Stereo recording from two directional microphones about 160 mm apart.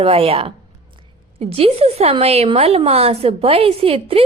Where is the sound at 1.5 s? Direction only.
40° right (ahead or behind).